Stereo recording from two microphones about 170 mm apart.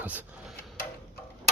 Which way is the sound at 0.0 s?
10° right (ahead or behind).